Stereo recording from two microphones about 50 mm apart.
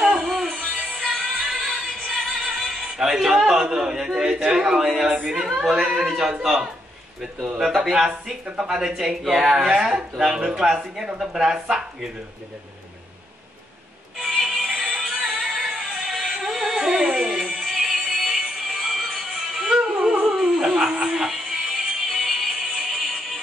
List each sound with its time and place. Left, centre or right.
0.0 s music: centre
1.1 s music: centre
3.0 s a man's voice: centre
7.5 s a man's voice: centre
14.1 s music: centre
20.0 s dog: centre
22.1 s music: centre